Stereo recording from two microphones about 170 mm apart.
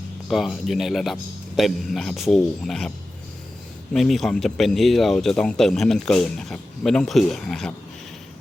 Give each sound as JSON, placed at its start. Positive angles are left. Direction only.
{"t": 0.3, "sound": "speech", "side_deg": 0}
{"t": 3.9, "sound": "speech", "side_deg": 0}